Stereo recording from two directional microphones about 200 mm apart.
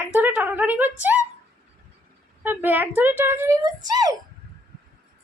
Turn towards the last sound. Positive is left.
turn(degrees=-20)  # may be behind; listen again after turning